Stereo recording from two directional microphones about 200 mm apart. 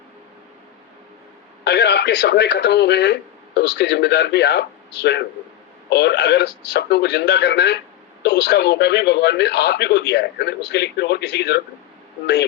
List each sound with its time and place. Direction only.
1.6 s speech: 55° left (ahead or behind)